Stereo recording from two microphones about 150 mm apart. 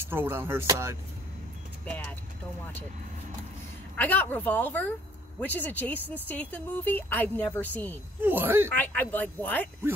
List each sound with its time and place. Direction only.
0.0 s speech: 15° right (ahead or behind)
3.9 s a woman's voice: 10° left (ahead or behind)
8.2 s speech: 15° right (ahead or behind)
8.6 s a woman's voice: 10° left (ahead or behind)